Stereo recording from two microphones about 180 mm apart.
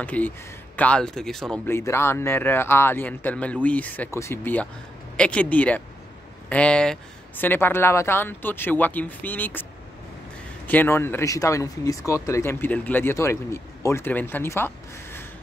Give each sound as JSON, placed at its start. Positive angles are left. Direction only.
{"t": 0.0, "sound": "speech", "side_deg": 10}
{"t": 1.7, "sound": "speech", "side_deg": 15}
{"t": 10.7, "sound": "speech", "side_deg": 10}